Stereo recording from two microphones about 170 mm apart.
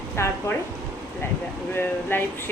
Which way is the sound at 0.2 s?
15° left (ahead or behind).